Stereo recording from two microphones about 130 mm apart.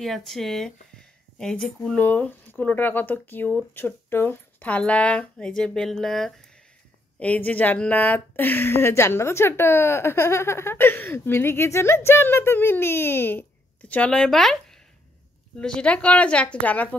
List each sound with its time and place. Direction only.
0.0 s a woman's voice: centre (ahead or behind)
15.6 s a woman's voice: 10° left (ahead or behind)